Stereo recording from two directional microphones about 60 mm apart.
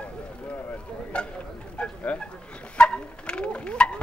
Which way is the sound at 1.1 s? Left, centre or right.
Centre.